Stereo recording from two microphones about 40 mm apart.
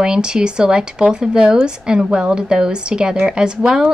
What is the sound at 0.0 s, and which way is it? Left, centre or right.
Speech, centre.